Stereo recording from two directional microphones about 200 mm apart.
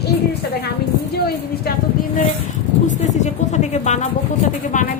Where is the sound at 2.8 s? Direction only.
35° left (ahead or behind).